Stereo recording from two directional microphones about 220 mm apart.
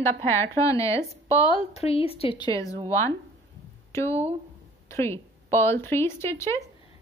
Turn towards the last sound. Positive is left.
turn(degrees=10)  # may be behind; listen again after turning